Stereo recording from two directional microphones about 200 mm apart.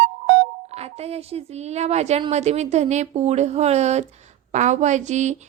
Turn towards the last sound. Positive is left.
turn(degrees=-35)  # may be behind; listen again after turning